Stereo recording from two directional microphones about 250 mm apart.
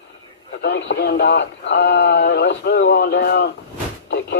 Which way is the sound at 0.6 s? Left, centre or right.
Left.